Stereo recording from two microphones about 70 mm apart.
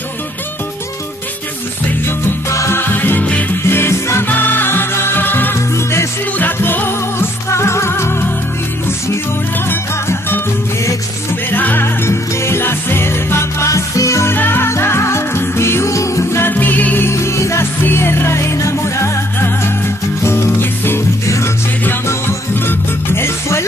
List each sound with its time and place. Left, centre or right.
2.5 s music: left
2.8 s music: left
3.6 s music: left
6.3 s music: left
9.7 s music: left
11.5 s music: left
14.3 s music: left
17.1 s music: left
22.7 s music: left